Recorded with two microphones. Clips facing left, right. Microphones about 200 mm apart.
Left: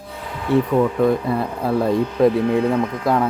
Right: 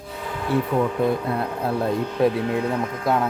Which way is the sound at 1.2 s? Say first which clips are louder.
Left 3 dB; centre (ahead or behind).